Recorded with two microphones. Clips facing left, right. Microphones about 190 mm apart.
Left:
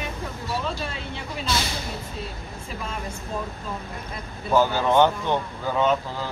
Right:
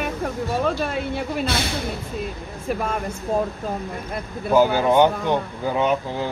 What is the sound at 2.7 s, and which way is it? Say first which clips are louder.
Speech: right 10 dB; 55° right (ahead or behind).